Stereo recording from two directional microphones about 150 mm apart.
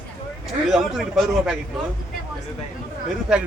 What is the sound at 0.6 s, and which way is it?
Speech, centre (ahead or behind).